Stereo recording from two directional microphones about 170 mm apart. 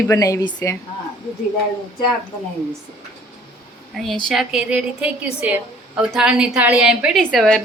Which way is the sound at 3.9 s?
Centre (ahead or behind).